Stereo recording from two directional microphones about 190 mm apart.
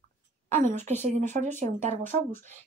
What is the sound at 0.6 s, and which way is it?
Speech, 40° right (ahead or behind).